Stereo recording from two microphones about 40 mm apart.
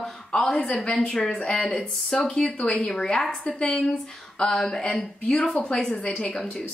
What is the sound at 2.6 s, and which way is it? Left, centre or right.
A woman's voice, left.